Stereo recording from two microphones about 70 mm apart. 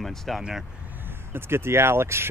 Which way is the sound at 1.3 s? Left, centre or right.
Right.